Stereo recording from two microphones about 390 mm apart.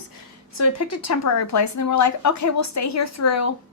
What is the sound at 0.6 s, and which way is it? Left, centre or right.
A woman's voice, left.